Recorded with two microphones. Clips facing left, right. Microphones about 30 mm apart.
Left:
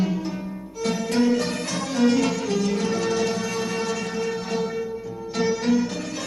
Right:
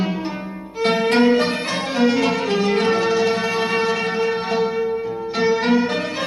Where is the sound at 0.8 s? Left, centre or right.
Right.